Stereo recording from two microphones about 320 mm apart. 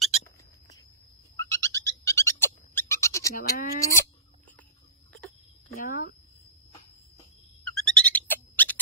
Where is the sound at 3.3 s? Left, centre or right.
Left.